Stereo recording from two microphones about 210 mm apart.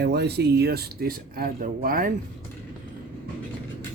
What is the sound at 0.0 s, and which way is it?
Speech, 50° right (ahead or behind).